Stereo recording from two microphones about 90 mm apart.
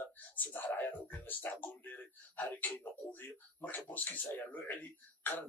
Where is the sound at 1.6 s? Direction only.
20° left (ahead or behind).